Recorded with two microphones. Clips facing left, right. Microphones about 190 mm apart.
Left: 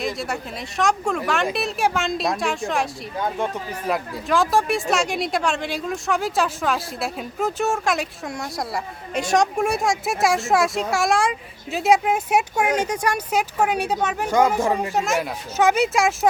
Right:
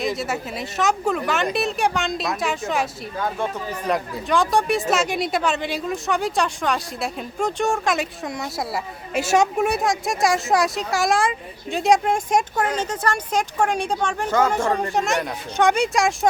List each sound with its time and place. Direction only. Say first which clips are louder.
0.0 s a woman's voice: right 2 dB; centre (ahead or behind)
3.8 s speech: right 1 dB; centre (ahead or behind)